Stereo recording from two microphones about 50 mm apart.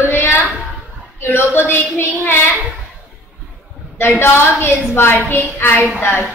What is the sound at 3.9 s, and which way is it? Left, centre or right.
A woman's voice, left.